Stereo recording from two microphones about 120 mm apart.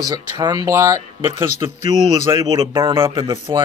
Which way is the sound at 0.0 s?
35° right (ahead or behind).